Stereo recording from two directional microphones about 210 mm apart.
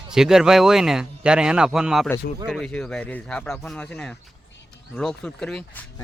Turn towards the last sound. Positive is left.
turn(degrees=5)  # may be behind; listen again after turning